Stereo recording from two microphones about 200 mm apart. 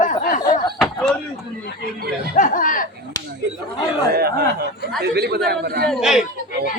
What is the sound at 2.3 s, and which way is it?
Speech, 40° left (ahead or behind).